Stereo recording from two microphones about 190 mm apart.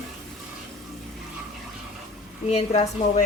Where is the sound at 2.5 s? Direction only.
35° left (ahead or behind).